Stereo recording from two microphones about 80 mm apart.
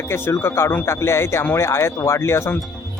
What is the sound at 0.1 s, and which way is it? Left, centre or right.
Speech, left.